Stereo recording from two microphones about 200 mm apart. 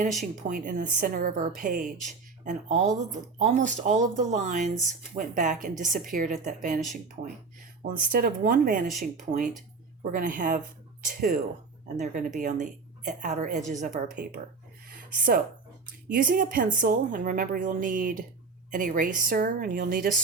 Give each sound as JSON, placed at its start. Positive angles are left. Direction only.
{"t": 0.4, "sound": "speech", "side_deg": -40}
{"t": 14.8, "sound": "a sound", "side_deg": -45}
{"t": 16.0, "sound": "speech", "side_deg": -45}